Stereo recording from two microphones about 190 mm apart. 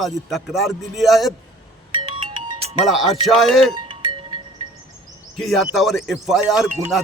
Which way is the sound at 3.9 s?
25° right (ahead or behind).